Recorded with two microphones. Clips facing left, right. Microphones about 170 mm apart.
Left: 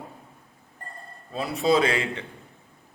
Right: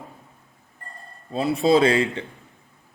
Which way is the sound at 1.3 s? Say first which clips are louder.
Right 4 dB; 30° right (ahead or behind).